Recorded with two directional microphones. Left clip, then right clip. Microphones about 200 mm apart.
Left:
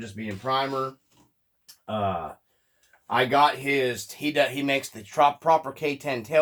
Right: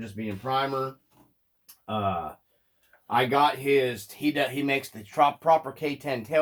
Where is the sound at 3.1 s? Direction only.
30° left (ahead or behind).